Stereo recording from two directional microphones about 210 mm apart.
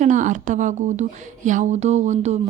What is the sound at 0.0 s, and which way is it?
Speech, 35° right (ahead or behind).